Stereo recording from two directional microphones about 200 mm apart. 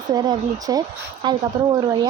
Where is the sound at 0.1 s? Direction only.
20° right (ahead or behind).